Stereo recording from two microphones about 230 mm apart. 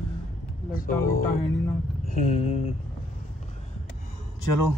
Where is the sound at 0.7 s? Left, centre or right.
Left.